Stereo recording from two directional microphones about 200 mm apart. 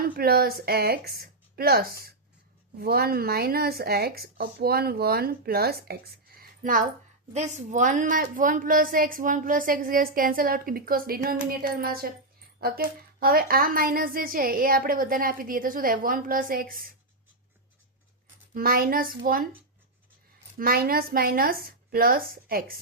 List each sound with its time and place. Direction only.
0.0 s a woman's voice: 45° right (ahead or behind)
18.5 s a woman's voice: 50° right (ahead or behind)
20.6 s a woman's voice: 45° right (ahead or behind)